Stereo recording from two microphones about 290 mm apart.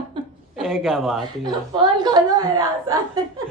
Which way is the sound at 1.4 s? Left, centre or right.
Centre.